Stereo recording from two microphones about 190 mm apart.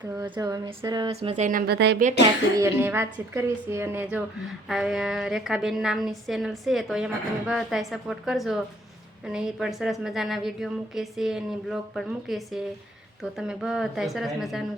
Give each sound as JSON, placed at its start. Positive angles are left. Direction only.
{"t": 0.2, "sound": "a sound", "side_deg": -20}
{"t": 1.1, "sound": "speech", "side_deg": -30}
{"t": 1.5, "sound": "speech", "side_deg": -50}
{"t": 2.6, "sound": "a woman's voice", "side_deg": -15}
{"t": 4.7, "sound": "a woman's voice", "side_deg": 0}